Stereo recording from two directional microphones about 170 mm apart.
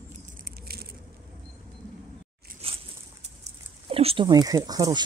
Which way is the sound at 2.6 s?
35° right (ahead or behind).